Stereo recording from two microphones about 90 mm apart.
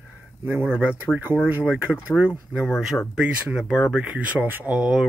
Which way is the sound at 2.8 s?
5° right (ahead or behind).